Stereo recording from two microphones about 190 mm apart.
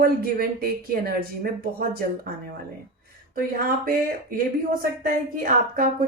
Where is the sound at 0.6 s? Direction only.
50° right (ahead or behind).